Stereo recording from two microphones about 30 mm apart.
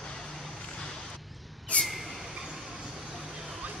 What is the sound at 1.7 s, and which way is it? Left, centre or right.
Vehicle, left.